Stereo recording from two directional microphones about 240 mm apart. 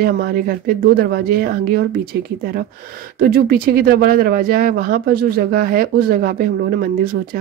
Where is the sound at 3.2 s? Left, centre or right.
Right.